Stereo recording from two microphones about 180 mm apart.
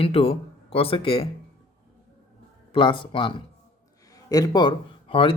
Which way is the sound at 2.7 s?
30° left (ahead or behind).